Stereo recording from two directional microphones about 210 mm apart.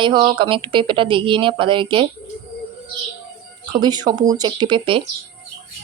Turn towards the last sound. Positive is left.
turn(degrees=-25)  # may be behind; listen again after turning